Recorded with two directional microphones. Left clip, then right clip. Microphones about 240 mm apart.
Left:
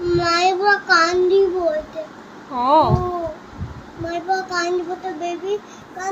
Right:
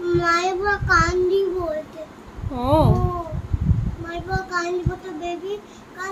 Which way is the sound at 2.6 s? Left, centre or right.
Right.